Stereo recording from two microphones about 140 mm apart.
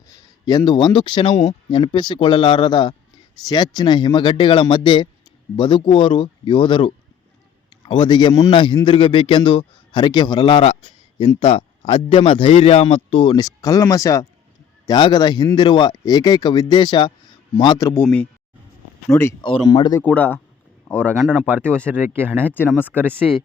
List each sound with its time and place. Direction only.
0.4 s speech: 30° left (ahead or behind)
17.8 s speech: 15° left (ahead or behind)
19.4 s speech: 35° left (ahead or behind)
20.0 s speech: 10° left (ahead or behind)
21.2 s speech: 10° right (ahead or behind)